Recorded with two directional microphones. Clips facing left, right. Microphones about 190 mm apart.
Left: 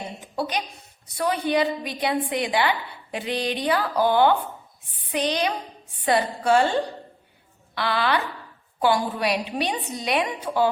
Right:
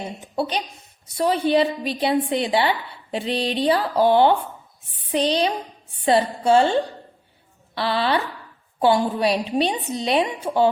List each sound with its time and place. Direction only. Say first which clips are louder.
0.3 s a woman's voice: right 3 dB; 30° right (ahead or behind)
7.8 s a woman's voice: right 2 dB; 30° right (ahead or behind)